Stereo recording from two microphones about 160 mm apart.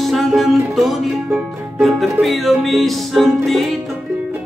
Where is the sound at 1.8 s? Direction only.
Centre (ahead or behind).